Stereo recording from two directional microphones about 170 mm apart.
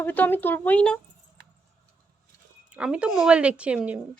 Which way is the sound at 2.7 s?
5° right (ahead or behind).